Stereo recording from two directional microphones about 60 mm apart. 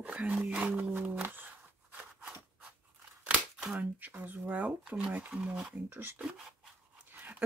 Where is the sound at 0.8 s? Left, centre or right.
Right.